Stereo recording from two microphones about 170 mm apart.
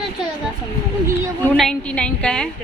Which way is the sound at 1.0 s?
15° right (ahead or behind).